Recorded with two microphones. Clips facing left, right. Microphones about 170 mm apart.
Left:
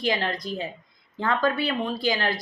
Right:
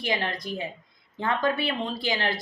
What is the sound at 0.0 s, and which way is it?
A woman's voice, 20° right (ahead or behind).